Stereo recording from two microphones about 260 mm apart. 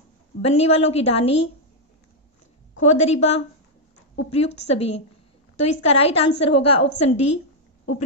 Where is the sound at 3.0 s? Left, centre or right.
Left.